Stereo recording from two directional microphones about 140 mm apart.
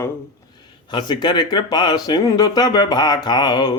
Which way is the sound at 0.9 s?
30° left (ahead or behind).